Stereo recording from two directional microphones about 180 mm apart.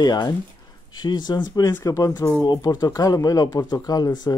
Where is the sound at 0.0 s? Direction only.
20° left (ahead or behind).